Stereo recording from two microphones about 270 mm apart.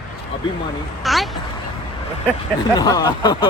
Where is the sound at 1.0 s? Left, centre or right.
Centre.